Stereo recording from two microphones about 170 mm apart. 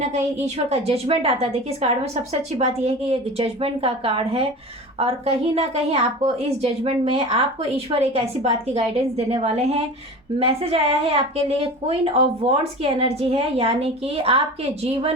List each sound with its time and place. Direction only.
0.1 s a woman's voice: 40° right (ahead or behind)